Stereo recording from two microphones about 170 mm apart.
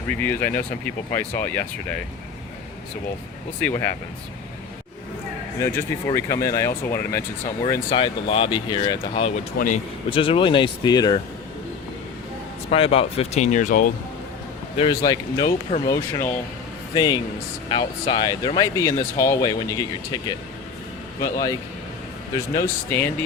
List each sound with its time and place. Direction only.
0.2 s speech: 10° left (ahead or behind)
3.6 s speech: 10° left (ahead or behind)
5.5 s speech: 15° left (ahead or behind); by 9.3 s 30° left (ahead or behind)
9.6 s speech: 50° left (ahead or behind)
10.1 s speech: 30° left (ahead or behind)
12.7 s speech: 35° left (ahead or behind); by 13.8 s 50° left (ahead or behind)
14.8 s speech: 25° left (ahead or behind)
21.2 s speech: 20° left (ahead or behind)
22.5 s speech: 10° left (ahead or behind)